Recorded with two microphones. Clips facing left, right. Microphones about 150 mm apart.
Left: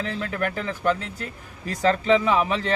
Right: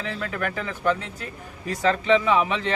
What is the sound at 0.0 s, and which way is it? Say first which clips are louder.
Speech: left 2 dB; 40° left (ahead or behind).